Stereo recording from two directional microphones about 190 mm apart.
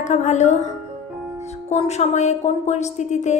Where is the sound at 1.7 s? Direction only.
35° left (ahead or behind).